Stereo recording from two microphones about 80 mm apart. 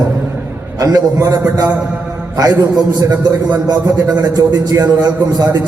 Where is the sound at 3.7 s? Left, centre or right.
Right.